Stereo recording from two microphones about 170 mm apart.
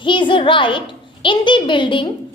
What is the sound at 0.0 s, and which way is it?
A child's voice, 30° left (ahead or behind).